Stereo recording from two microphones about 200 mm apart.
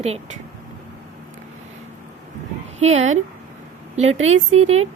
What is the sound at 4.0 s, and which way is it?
Speech, 35° right (ahead or behind).